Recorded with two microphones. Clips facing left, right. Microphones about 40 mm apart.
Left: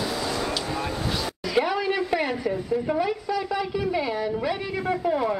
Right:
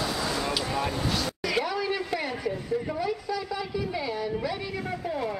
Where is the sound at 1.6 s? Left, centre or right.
Left.